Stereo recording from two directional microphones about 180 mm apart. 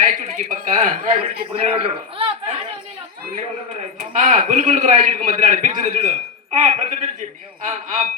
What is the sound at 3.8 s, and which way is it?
A man's voice, 45° right (ahead or behind).